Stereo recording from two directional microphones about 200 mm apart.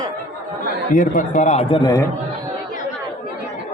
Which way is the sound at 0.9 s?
40° left (ahead or behind).